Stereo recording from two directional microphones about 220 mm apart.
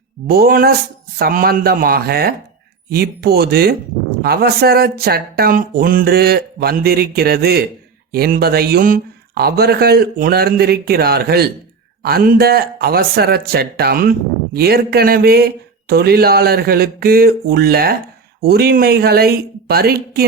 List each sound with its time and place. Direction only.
0.3 s speech: 45° right (ahead or behind)